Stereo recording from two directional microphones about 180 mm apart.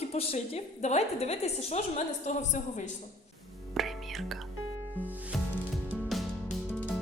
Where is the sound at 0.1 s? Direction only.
35° left (ahead or behind).